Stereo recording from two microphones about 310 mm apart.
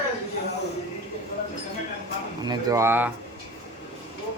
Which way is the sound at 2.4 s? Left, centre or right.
Centre.